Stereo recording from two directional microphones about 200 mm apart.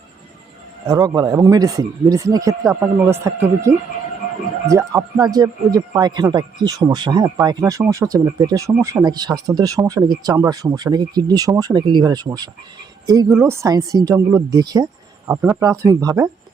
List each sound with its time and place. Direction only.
0.9 s speech: 20° right (ahead or behind)
15.3 s speech: 10° right (ahead or behind)